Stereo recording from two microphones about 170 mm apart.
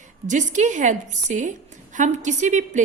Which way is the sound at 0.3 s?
45° right (ahead or behind).